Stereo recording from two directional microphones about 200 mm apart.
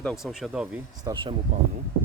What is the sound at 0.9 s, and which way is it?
Speech, 20° right (ahead or behind).